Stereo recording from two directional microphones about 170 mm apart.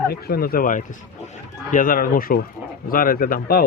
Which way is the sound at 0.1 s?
65° left (ahead or behind).